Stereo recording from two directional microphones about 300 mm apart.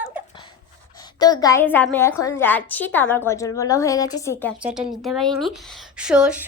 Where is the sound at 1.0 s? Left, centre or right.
Centre.